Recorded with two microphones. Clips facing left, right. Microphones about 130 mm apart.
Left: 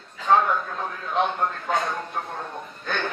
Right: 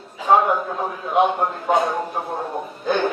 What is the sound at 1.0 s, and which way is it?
A man's voice, 15° right (ahead or behind).